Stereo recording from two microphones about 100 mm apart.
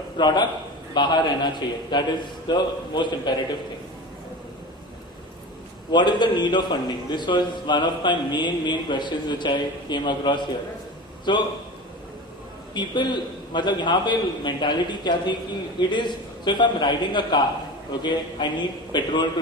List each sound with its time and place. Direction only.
0.2 s a man's voice: 45° left (ahead or behind)
5.9 s a man's voice: 50° left (ahead or behind)
12.7 s a man's voice: 50° left (ahead or behind)